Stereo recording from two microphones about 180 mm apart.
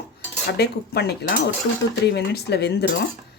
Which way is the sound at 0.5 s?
65° left (ahead or behind).